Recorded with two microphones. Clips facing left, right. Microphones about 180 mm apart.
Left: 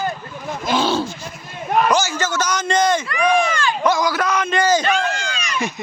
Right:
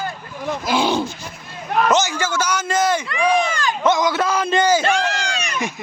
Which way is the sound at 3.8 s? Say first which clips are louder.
Right 2 dB; 20° right (ahead or behind).